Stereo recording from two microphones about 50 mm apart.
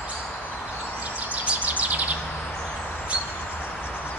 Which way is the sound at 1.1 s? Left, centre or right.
Right.